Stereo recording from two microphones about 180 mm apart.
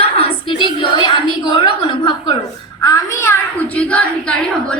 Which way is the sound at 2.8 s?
15° left (ahead or behind).